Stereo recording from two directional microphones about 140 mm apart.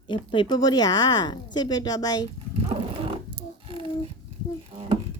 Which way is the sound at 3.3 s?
40° right (ahead or behind).